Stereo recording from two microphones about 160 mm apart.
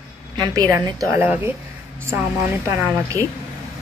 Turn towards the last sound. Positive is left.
turn(degrees=-20)  # may be behind; listen again after turning